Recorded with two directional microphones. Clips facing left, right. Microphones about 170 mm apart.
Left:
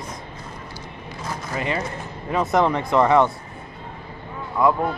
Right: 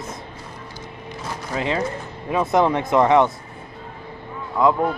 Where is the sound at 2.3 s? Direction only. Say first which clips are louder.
Right 1 dB; 15° right (ahead or behind).